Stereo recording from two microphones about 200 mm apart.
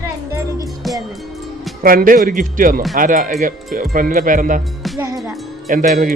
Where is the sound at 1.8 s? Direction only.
45° right (ahead or behind).